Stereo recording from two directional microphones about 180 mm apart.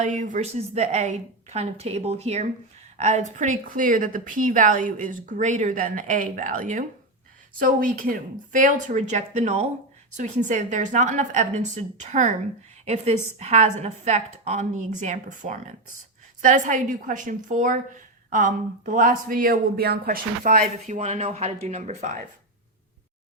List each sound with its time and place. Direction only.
0.0 s a woman's voice: 45° right (ahead or behind)